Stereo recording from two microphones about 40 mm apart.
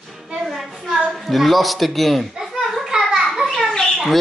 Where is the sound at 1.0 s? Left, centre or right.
Centre.